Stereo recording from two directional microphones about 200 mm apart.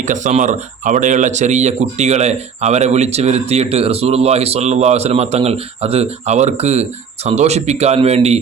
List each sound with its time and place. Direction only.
0.0 s speech: 40° right (ahead or behind)